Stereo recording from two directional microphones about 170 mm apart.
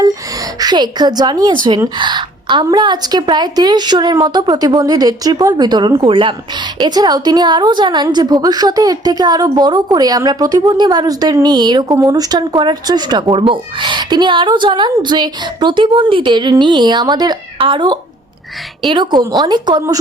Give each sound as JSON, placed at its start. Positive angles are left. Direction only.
{"t": 0.0, "sound": "a woman's voice", "side_deg": -20}